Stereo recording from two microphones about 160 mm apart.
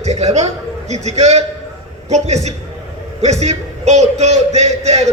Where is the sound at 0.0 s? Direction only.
45° right (ahead or behind).